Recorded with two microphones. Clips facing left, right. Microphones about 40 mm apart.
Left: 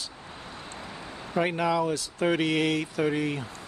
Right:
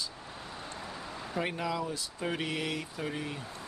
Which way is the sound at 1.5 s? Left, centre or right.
Left.